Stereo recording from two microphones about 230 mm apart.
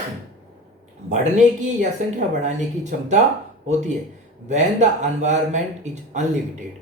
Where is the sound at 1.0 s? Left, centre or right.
Right.